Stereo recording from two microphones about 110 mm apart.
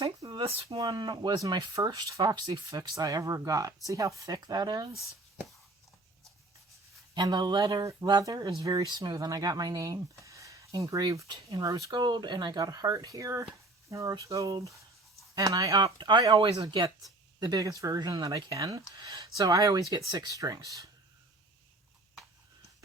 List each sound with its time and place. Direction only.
0.3 s speech: 55° right (ahead or behind)
0.8 s speech: 40° right (ahead or behind)
7.1 s speech: 40° right (ahead or behind)
16.0 s speech: 45° right (ahead or behind)
17.4 s speech: 35° right (ahead or behind)